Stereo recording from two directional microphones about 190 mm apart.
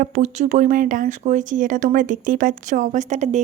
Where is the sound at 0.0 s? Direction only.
40° right (ahead or behind).